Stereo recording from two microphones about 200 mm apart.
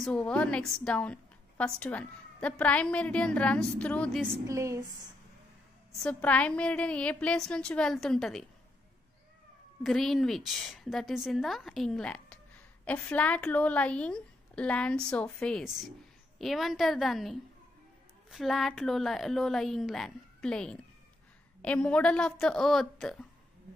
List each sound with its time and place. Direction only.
0.0 s a woman's voice: 5° left (ahead or behind)
4.5 s a woman's voice: 15° right (ahead or behind)
6.0 s a woman's voice: 5° left (ahead or behind)
9.8 s a woman's voice: centre (ahead or behind)